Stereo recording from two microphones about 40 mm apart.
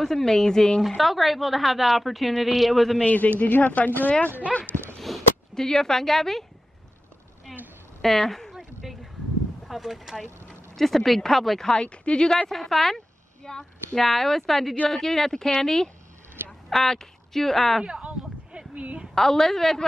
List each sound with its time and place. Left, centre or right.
0.0 s speech: centre
0.8 s a woman's voice: centre
3.1 s speech: left
5.1 s a sound: centre
5.5 s speech: centre
7.5 s a sound: centre
8.0 s a woman's voice: centre
9.7 s a woman's voice: centre
11.7 s speech: left
12.4 s a woman's voice: centre
17.8 s a sound: right
18.8 s a sound: right
19.1 s speech: centre